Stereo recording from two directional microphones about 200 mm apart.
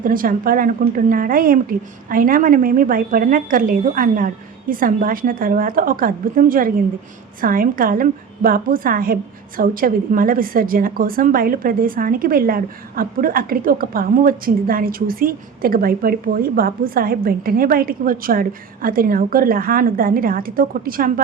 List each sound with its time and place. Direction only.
0.0 s a woman's voice: 45° right (ahead or behind)